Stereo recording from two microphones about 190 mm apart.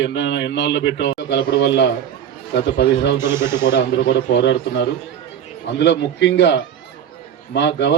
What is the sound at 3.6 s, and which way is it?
A man's voice, 65° left (ahead or behind).